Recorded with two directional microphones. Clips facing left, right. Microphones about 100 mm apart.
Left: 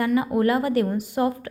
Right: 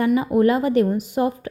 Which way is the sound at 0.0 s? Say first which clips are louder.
Right 3 dB; 20° right (ahead or behind).